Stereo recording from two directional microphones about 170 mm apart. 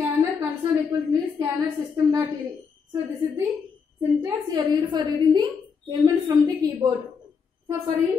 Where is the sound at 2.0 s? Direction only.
15° right (ahead or behind).